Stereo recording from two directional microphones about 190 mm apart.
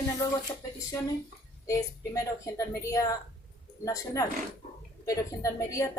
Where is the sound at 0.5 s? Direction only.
15° left (ahead or behind).